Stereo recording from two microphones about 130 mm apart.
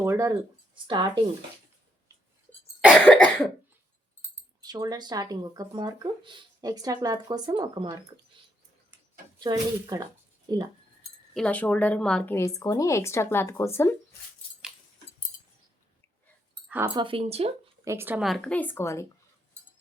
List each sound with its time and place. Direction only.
0.0 s speech: 25° right (ahead or behind)
0.9 s speech: 40° right (ahead or behind)
2.9 s a woman's voice: 10° left (ahead or behind)
4.6 s speech: 30° right (ahead or behind)
9.4 s speech: 30° right (ahead or behind)
11.3 s a woman's voice: 10° left (ahead or behind)
12.3 s speech: 25° left (ahead or behind)
16.8 s speech: 35° right (ahead or behind)
17.8 s speech: 15° right (ahead or behind)
18.2 s a woman's voice: centre (ahead or behind); by 19.0 s 20° left (ahead or behind)